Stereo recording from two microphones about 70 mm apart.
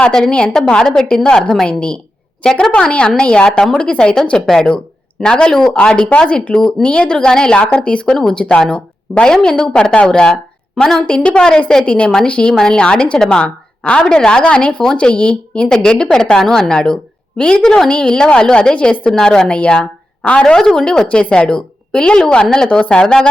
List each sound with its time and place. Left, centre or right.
0.0 s a woman's voice: centre